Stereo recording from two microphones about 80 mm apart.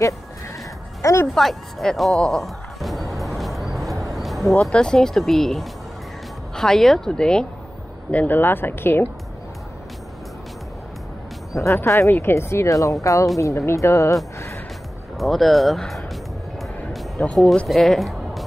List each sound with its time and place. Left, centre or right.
1.3 s music: centre
4.0 s speech: centre
8.1 s speech: left
11.5 s speech: left
15.1 s speech: centre
17.2 s speech: centre
17.6 s speech: centre